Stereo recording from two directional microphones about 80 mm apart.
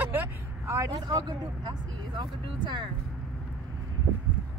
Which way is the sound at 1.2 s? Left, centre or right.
Right.